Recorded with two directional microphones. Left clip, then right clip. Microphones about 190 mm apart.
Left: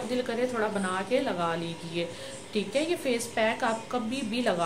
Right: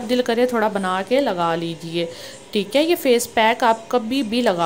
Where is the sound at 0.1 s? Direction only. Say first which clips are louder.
Right 12 dB; 45° right (ahead or behind).